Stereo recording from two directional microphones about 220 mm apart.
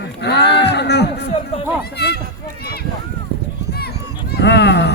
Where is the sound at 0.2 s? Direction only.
50° left (ahead or behind).